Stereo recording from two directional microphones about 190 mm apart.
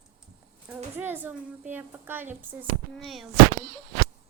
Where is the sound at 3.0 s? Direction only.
Centre (ahead or behind).